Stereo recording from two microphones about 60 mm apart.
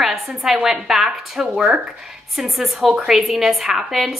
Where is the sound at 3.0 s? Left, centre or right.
Centre.